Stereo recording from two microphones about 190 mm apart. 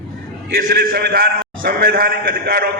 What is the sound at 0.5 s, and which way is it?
A man's voice, 50° right (ahead or behind).